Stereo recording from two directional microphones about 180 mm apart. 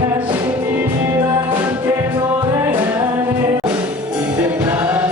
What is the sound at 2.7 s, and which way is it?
Music, 10° right (ahead or behind).